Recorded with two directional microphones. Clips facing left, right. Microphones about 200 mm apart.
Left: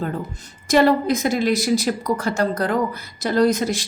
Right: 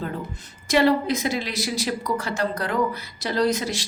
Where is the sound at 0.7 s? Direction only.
45° left (ahead or behind).